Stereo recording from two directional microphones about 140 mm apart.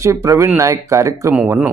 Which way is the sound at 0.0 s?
20° right (ahead or behind).